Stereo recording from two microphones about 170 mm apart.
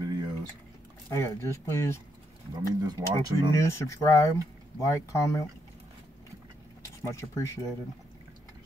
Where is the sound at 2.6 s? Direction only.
25° right (ahead or behind).